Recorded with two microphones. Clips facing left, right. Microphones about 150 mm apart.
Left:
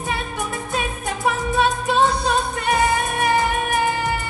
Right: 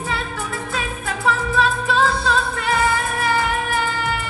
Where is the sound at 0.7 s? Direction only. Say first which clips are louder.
Left 3 dB; 20° left (ahead or behind).